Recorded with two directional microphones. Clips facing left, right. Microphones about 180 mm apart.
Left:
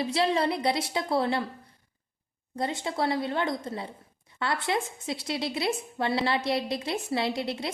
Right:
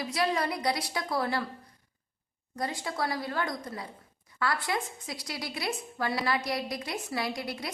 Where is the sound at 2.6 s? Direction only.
25° left (ahead or behind).